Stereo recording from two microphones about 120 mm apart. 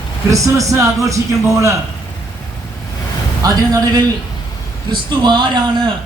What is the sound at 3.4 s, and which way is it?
Speech, 30° right (ahead or behind).